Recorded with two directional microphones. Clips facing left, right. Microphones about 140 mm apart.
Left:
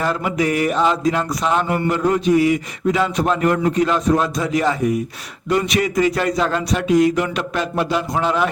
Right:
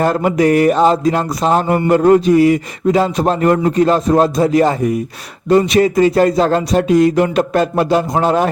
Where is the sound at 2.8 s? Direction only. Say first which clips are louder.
Right 5 dB; 35° right (ahead or behind).